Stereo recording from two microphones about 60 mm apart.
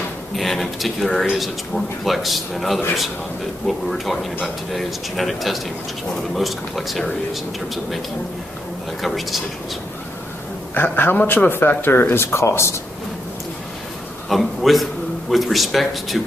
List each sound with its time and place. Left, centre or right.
0.4 s a man's voice: centre
9.0 s a man's voice: centre
10.7 s a man's voice: left
14.3 s a man's voice: centre